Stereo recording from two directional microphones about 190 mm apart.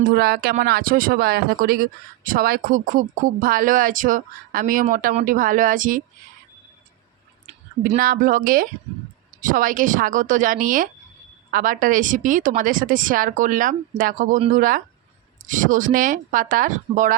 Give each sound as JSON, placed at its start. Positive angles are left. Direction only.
{"t": 0.1, "sound": "speech", "side_deg": -55}
{"t": 7.9, "sound": "speech", "side_deg": -50}